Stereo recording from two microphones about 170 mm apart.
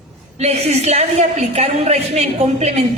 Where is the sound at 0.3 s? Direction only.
40° right (ahead or behind).